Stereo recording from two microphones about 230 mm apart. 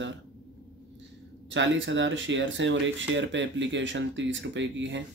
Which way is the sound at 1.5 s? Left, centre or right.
Right.